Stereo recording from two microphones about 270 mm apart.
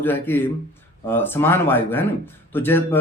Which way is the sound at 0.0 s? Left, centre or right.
Centre.